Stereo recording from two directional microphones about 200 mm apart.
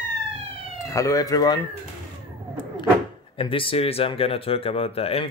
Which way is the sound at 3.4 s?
25° left (ahead or behind).